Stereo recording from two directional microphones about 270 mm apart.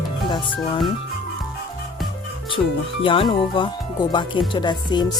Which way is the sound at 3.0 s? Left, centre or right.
Centre.